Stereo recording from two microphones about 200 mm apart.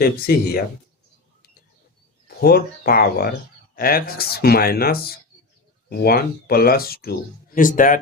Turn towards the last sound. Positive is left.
turn(degrees=40)  # may be behind; listen again after turning